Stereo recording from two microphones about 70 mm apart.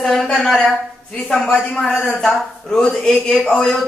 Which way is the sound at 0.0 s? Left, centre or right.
Centre.